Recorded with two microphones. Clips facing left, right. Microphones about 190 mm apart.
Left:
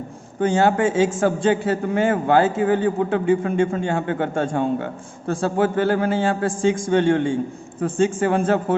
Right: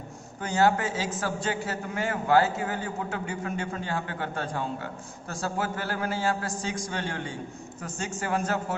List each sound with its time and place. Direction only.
0.4 s a man's voice: 25° left (ahead or behind)